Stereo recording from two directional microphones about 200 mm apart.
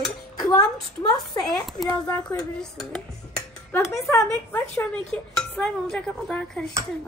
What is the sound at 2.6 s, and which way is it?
Dishes, 5° left (ahead or behind).